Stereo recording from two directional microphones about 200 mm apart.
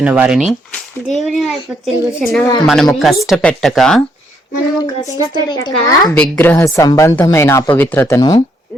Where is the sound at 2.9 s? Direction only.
Centre (ahead or behind).